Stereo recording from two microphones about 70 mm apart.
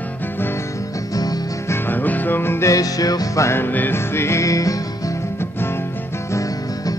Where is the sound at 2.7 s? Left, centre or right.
Left.